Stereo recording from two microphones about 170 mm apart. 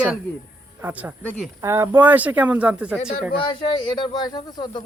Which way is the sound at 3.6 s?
25° left (ahead or behind).